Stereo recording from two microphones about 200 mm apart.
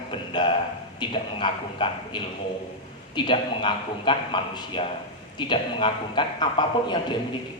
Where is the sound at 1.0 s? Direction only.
25° left (ahead or behind).